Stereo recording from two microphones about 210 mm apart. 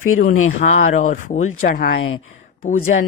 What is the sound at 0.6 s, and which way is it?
Speech, 40° left (ahead or behind).